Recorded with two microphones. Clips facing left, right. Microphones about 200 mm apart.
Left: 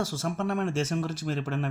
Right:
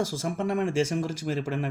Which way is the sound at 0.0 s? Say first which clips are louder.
Right 2 dB; 10° right (ahead or behind).